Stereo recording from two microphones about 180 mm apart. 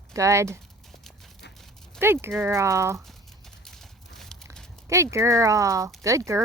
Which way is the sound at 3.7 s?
Centre (ahead or behind).